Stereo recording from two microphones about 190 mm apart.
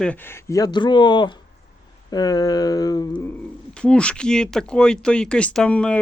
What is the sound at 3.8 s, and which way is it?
Speech, 5° left (ahead or behind).